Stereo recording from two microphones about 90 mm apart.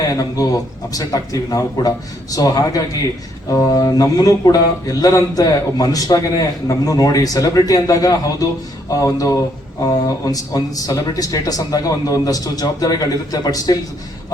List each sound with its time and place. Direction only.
0.1 s speech: 40° left (ahead or behind)
10.3 s speech: 40° left (ahead or behind)